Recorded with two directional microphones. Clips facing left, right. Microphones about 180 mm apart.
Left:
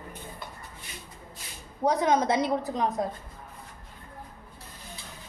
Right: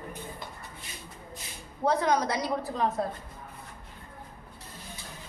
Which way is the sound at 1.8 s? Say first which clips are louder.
Left 2 dB; 20° left (ahead or behind).